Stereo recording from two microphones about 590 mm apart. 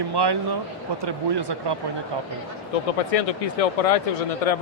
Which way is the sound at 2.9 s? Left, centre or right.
Left.